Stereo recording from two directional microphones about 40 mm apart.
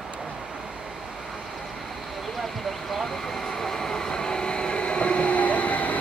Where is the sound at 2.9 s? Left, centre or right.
Centre.